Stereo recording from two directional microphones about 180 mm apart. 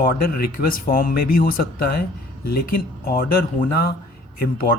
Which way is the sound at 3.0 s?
55° left (ahead or behind).